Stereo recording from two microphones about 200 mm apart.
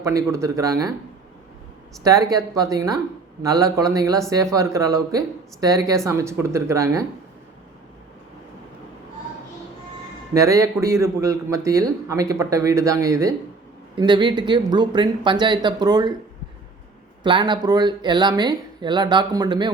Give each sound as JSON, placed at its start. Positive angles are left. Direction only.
{"t": 0.0, "sound": "a man's voice", "side_deg": -15}
{"t": 2.3, "sound": "a man's voice", "side_deg": -15}
{"t": 10.3, "sound": "a man's voice", "side_deg": -15}
{"t": 17.2, "sound": "speech", "side_deg": -25}